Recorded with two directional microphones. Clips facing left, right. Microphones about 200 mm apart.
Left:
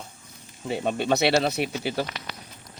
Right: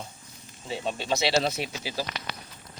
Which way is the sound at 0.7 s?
55° left (ahead or behind).